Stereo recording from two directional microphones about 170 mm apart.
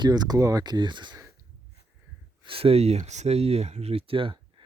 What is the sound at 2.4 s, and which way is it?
Speech, 35° right (ahead or behind).